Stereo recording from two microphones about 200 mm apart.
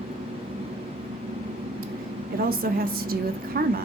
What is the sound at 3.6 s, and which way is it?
Speech, 50° right (ahead or behind).